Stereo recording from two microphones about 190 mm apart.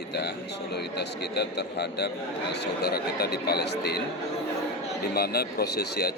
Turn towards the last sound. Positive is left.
turn(degrees=55)  # may be behind; listen again after turning